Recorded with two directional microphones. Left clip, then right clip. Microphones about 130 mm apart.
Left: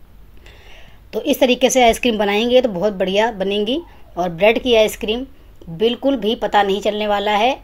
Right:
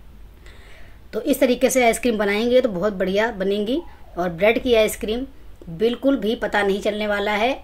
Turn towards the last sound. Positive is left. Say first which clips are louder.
# left 5 dB
turn(degrees=20)  # may be behind; listen again after turning